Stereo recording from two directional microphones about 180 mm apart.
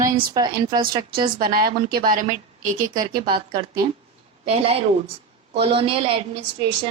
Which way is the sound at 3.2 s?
25° right (ahead or behind).